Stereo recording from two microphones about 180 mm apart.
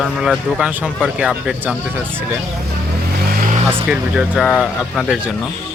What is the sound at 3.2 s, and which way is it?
Vehicle, 50° right (ahead or behind).